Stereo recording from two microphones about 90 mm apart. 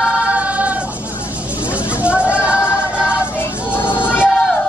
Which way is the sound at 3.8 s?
25° left (ahead or behind).